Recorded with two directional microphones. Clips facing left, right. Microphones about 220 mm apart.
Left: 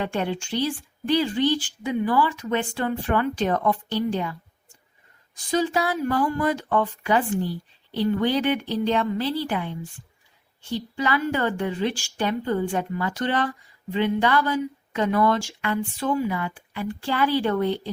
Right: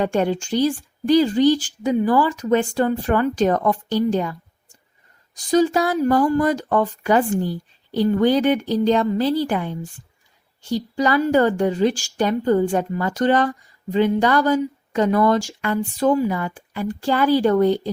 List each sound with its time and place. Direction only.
0.0 s speech: 45° right (ahead or behind)